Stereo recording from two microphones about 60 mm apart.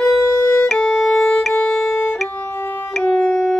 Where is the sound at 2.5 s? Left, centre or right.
Left.